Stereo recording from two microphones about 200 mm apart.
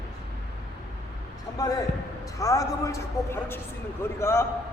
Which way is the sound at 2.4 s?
15° left (ahead or behind).